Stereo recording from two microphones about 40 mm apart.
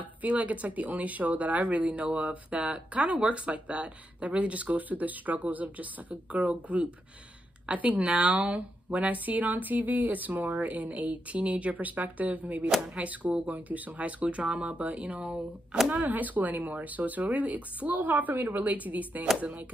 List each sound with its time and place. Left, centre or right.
0.0 s a woman's voice: right